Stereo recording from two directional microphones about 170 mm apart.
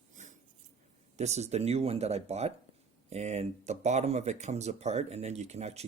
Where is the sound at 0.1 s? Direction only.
45° right (ahead or behind).